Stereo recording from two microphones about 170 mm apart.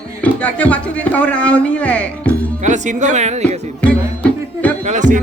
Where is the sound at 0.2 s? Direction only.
10° left (ahead or behind).